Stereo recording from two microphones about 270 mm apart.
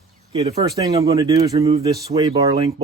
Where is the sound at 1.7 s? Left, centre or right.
Right.